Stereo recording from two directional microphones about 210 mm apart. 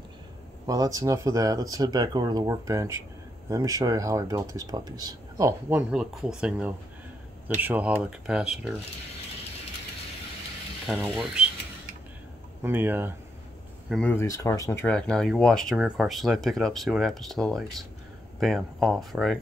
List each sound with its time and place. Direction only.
0.7 s speech: 15° right (ahead or behind)
10.9 s speech: 5° right (ahead or behind)
12.6 s speech: 10° right (ahead or behind)
13.8 s speech: 5° left (ahead or behind)